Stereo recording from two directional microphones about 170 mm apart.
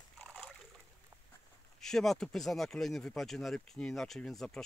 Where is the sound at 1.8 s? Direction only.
Centre (ahead or behind).